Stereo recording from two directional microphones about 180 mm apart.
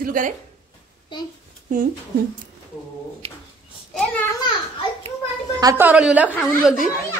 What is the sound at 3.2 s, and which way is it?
Speech, 35° right (ahead or behind).